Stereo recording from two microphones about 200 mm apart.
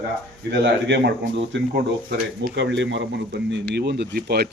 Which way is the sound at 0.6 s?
60° right (ahead or behind).